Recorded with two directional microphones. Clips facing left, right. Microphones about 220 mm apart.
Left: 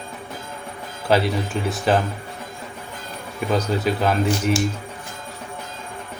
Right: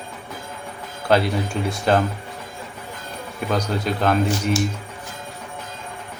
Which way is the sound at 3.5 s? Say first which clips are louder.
Left 2 dB; 5° left (ahead or behind).